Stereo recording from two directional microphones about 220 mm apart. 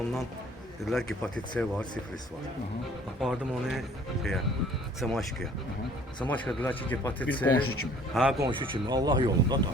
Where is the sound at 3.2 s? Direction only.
Centre (ahead or behind).